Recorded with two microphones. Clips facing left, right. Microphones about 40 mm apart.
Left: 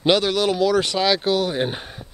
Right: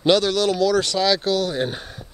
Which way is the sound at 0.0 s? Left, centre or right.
Centre.